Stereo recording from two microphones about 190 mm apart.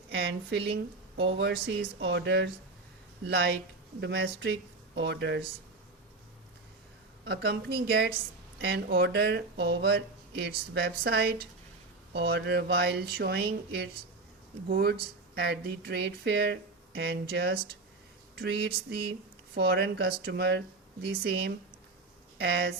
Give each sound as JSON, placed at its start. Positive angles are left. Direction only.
{"t": 0.1, "sound": "speech", "side_deg": -60}
{"t": 7.9, "sound": "speech", "side_deg": -55}